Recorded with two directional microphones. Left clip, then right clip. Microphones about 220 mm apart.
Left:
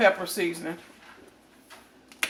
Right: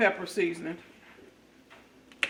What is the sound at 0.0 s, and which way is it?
Speech, 10° left (ahead or behind).